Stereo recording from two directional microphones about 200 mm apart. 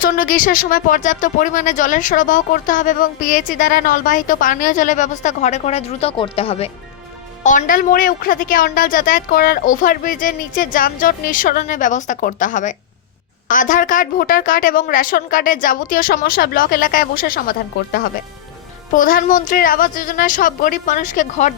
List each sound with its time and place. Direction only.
0.0 s speech: 45° left (ahead or behind); by 6.7 s 30° left (ahead or behind)
7.4 s a woman's voice: 40° left (ahead or behind)